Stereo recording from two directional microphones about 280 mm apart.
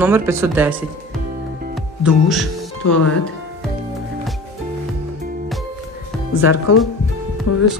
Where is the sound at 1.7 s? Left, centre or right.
Centre.